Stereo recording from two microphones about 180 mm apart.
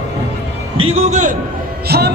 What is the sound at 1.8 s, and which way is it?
Speech, 60° right (ahead or behind).